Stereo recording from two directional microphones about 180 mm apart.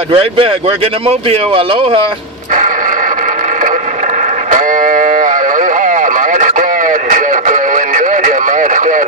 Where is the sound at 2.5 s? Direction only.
45° right (ahead or behind).